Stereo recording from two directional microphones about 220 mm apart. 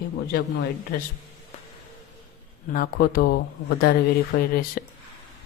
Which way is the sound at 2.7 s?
40° left (ahead or behind).